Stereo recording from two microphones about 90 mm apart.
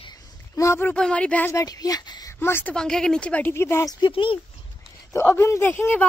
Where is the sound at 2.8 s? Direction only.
5° left (ahead or behind).